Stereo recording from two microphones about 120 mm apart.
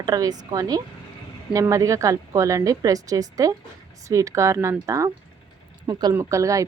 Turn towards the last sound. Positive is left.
turn(degrees=-25)  # may be behind; listen again after turning